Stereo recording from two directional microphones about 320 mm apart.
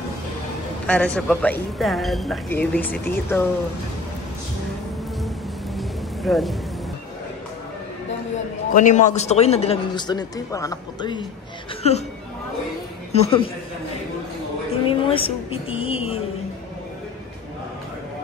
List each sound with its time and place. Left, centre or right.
0.8 s speech: centre
5.8 s a sound: centre
8.7 s a man's voice: left
13.1 s speech: centre
14.9 s a woman's voice: centre